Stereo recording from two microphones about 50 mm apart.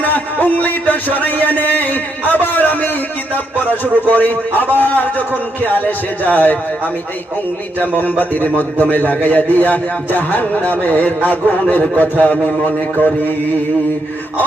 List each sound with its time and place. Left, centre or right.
0.0 s a sound: left
4.0 s a man's voice: left
6.2 s a man's voice: left
7.8 s a man's voice: left